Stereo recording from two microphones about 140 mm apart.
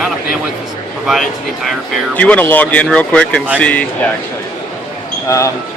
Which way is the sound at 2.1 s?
10° left (ahead or behind).